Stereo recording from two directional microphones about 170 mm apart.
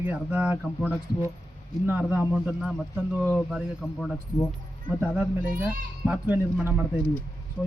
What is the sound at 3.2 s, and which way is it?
Speech, 10° left (ahead or behind).